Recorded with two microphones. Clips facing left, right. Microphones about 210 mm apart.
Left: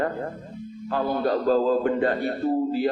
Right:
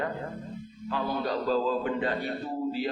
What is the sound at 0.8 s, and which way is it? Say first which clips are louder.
Speech: left 6 dB; 50° left (ahead or behind).